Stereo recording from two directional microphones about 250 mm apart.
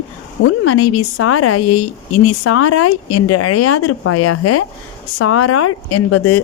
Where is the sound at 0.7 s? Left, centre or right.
Left.